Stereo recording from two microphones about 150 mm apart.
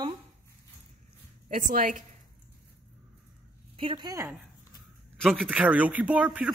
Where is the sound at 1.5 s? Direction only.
65° right (ahead or behind).